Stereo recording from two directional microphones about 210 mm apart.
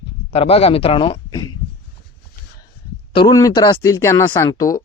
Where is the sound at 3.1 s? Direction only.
20° left (ahead or behind).